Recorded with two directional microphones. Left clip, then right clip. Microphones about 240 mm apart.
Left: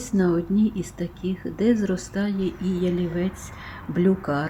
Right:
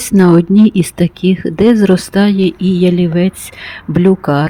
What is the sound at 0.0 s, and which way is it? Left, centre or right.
Speech, right.